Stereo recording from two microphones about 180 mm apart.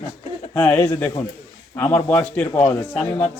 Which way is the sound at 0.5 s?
10° left (ahead or behind).